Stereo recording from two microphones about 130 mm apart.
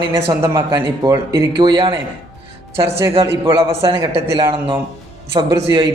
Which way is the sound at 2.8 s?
20° right (ahead or behind).